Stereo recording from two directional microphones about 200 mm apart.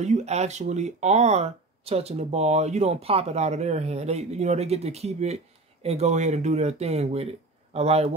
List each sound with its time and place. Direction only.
0.0 s speech: 35° right (ahead or behind)